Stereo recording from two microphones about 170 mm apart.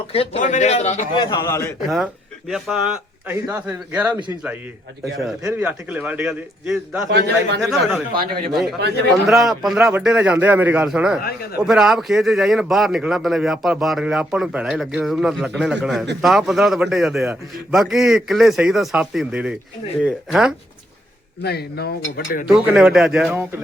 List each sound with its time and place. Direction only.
0.1 s a man's voice: 40° left (ahead or behind)
1.1 s a man's voice: 25° left (ahead or behind)
2.5 s a man's voice: 5° right (ahead or behind)
7.1 s a man's voice: 80° right
7.6 s a man's voice: centre (ahead or behind)
8.2 s a man's voice: 60° right (ahead or behind)
9.2 s a man's voice: centre (ahead or behind)
21.4 s speech: 70° left (ahead or behind)
22.4 s a man's voice: 5° right (ahead or behind)